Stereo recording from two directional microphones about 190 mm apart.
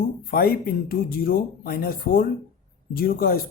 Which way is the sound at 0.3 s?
50° left (ahead or behind).